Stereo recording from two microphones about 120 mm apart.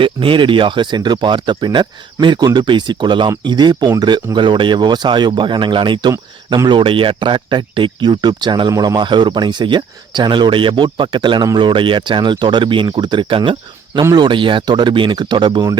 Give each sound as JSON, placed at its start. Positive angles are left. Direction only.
{"t": 0.0, "sound": "speech", "side_deg": -45}